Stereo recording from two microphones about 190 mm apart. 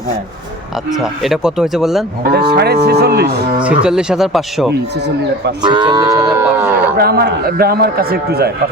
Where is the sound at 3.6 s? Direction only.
5° right (ahead or behind).